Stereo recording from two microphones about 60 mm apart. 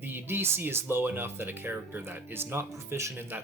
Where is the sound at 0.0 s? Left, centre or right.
Right.